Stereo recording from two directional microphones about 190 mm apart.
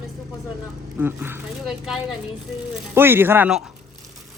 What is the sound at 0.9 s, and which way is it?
Speech, 10° right (ahead or behind).